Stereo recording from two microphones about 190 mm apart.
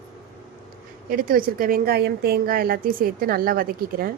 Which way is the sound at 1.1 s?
50° right (ahead or behind).